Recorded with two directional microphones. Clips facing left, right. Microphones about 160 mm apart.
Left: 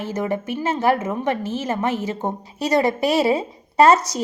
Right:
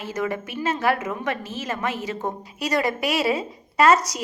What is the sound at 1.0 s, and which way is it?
A woman's voice, 25° left (ahead or behind).